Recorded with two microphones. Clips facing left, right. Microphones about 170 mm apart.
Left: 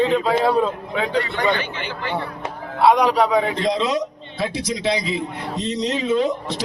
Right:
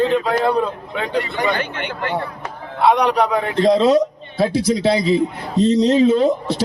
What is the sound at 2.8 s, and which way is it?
Speech, centre (ahead or behind).